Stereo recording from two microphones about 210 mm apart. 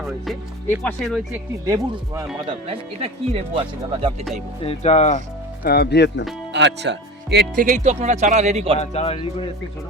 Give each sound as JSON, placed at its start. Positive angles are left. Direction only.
{"t": 0.0, "sound": "speech", "side_deg": 0}
{"t": 1.6, "sound": "speech", "side_deg": -15}
{"t": 4.6, "sound": "speech", "side_deg": 30}
{"t": 5.6, "sound": "speech", "side_deg": 50}
{"t": 6.5, "sound": "speech", "side_deg": -55}
{"t": 8.8, "sound": "speech", "side_deg": 30}